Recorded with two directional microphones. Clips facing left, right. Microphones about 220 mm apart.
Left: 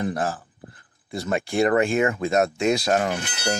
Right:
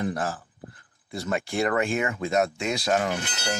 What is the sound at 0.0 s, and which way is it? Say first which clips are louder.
Speech: left 2 dB; 30° left (ahead or behind).